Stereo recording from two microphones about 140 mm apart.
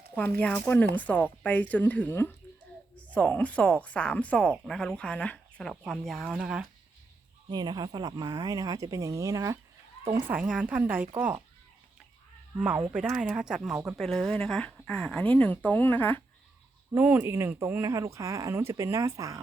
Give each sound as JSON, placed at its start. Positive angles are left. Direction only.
{"t": 0.1, "sound": "speech", "side_deg": 10}
{"t": 7.5, "sound": "speech", "side_deg": -30}
{"t": 10.2, "sound": "a woman's voice", "side_deg": -10}
{"t": 12.5, "sound": "a woman's voice", "side_deg": -10}
{"t": 16.9, "sound": "speech", "side_deg": -15}